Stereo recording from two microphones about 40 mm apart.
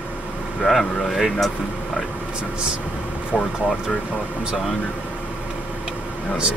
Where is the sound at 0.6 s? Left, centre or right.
Centre.